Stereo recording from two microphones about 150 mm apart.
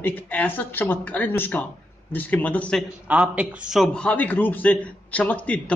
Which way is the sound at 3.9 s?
10° left (ahead or behind).